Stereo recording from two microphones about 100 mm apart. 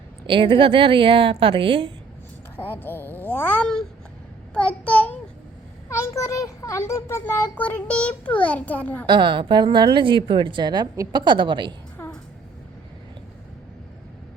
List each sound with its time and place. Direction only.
0.3 s a woman's voice: 60° right (ahead or behind)
2.6 s a child's voice: 20° left (ahead or behind)
4.5 s child singing: 15° left (ahead or behind)
5.9 s a child's voice: 30° left (ahead or behind)
9.0 s a woman's voice: 50° right (ahead or behind)
10.9 s a woman's voice: 35° right (ahead or behind)
11.2 s a woman's voice: 50° right (ahead or behind)
12.0 s a sound: 25° left (ahead or behind)